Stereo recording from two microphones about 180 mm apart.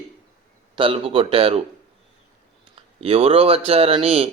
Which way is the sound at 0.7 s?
30° right (ahead or behind).